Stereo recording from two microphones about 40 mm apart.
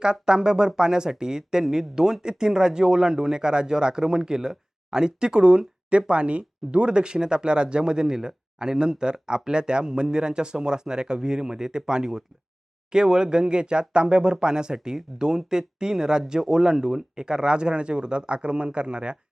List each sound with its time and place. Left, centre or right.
0.0 s speech: centre